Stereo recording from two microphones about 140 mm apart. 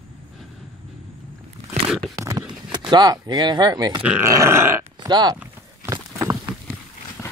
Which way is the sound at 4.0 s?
10° right (ahead or behind).